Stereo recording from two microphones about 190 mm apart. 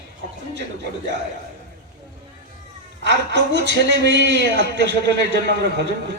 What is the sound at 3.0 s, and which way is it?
A man's voice, 65° right (ahead or behind).